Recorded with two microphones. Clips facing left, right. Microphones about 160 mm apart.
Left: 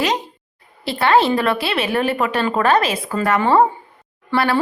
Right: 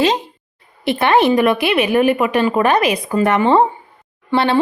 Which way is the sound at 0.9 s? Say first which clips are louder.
Right 2 dB; 20° right (ahead or behind).